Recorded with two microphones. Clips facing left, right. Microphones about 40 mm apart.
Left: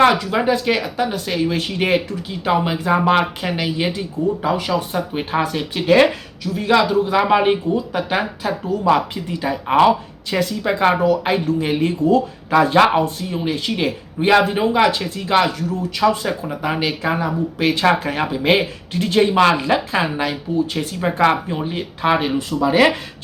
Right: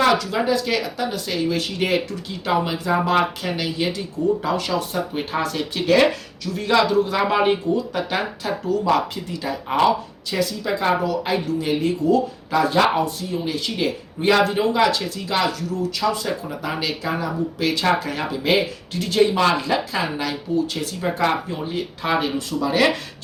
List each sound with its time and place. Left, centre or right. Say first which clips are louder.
0.0 s speech: left 4 dB; left
2.7 s speech: left 4 dB; left
4.4 s speech: left 3 dB; centre